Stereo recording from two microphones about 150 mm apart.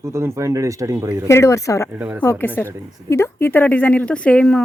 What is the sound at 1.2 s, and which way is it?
Speech, 20° left (ahead or behind).